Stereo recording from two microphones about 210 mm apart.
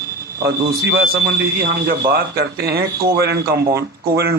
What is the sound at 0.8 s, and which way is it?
Speech, 50° right (ahead or behind).